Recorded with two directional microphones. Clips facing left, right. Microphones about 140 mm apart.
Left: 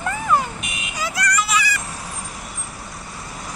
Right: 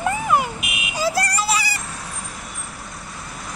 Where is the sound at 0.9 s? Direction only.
30° right (ahead or behind).